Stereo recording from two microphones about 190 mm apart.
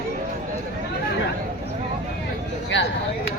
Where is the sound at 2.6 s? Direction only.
65° left (ahead or behind).